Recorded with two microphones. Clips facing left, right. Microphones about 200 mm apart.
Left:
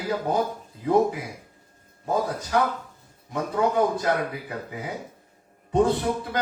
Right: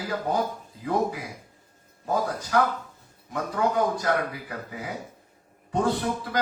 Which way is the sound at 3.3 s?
25° left (ahead or behind).